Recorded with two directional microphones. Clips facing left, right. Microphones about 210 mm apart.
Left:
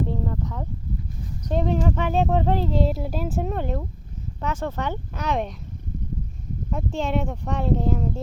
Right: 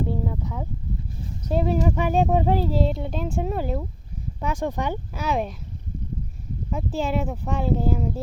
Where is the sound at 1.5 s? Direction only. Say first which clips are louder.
Right 1 dB; 5° right (ahead or behind).